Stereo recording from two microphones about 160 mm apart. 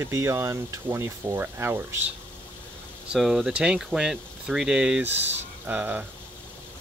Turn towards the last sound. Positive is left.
turn(degrees=-10)  # may be behind; listen again after turning